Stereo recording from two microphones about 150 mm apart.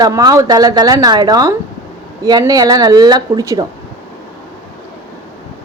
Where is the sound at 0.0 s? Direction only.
25° right (ahead or behind).